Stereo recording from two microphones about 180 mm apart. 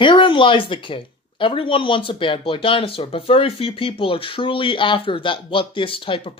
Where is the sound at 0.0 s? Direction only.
25° left (ahead or behind).